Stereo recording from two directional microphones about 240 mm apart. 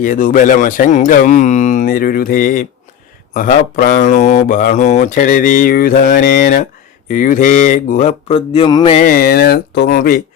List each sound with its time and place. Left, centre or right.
0.0 s speech: left
9.0 s speech: left